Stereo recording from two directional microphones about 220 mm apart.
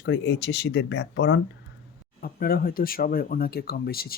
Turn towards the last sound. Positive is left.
turn(degrees=45)  # may be behind; listen again after turning